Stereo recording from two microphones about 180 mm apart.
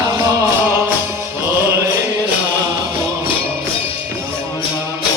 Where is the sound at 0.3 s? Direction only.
15° right (ahead or behind).